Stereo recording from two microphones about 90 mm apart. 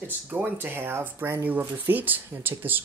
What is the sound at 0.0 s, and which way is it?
Speech, 20° right (ahead or behind).